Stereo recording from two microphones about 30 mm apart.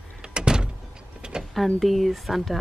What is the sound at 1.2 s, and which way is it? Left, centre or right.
Vehicle, right.